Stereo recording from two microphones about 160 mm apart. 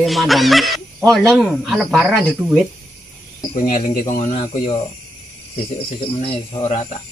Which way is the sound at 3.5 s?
55° left (ahead or behind).